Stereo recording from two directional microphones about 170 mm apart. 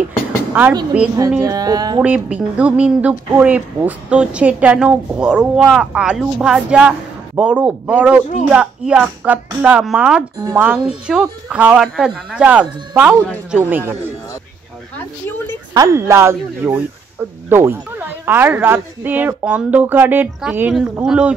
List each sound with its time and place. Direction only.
0.5 s a sound: 10° right (ahead or behind)
1.4 s speech: 20° right (ahead or behind)
2.0 s speech: 5° right (ahead or behind)
15.7 s speech: 20° right (ahead or behind)